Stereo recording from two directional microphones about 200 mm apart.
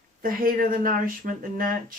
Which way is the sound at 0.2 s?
45° right (ahead or behind).